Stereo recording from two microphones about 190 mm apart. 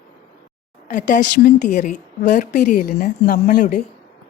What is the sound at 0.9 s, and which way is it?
Speech, 40° left (ahead or behind).